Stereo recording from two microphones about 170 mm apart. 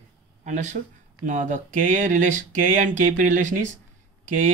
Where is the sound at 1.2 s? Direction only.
50° right (ahead or behind).